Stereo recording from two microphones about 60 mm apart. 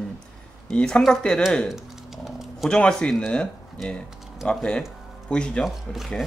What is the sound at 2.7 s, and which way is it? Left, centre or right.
Speech, centre.